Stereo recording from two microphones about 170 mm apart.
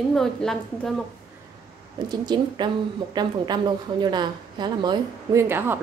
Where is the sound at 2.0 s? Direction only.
25° right (ahead or behind).